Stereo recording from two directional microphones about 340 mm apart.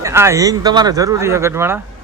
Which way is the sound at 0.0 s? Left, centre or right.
Centre.